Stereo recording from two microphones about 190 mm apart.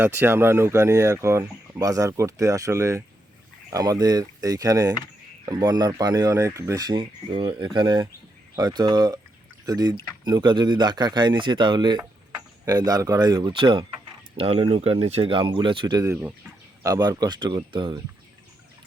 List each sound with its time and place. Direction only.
0.0 s speech: 10° right (ahead or behind)